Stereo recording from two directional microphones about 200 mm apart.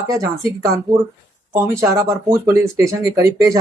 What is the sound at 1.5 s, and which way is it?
Speech, 15° right (ahead or behind).